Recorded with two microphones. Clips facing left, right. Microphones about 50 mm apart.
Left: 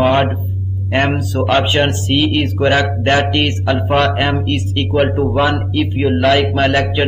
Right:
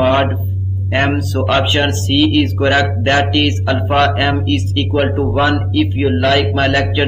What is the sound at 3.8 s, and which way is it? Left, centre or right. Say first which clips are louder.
A man's voice: right 1 dB; centre.